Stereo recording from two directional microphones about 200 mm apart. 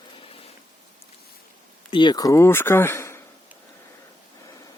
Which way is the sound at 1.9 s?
25° left (ahead or behind).